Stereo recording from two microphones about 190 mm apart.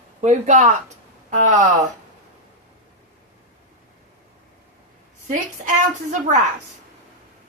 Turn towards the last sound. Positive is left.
turn(degrees=-40)  # may be behind; listen again after turning